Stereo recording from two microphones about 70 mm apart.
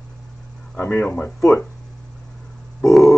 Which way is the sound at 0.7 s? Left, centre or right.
Left.